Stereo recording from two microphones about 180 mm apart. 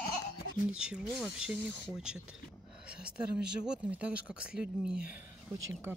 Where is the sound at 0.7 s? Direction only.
5° right (ahead or behind).